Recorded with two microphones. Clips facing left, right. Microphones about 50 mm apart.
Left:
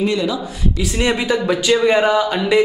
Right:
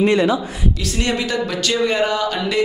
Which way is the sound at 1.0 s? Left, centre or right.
Centre.